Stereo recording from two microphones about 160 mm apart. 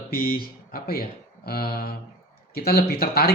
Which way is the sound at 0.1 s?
70° left (ahead or behind).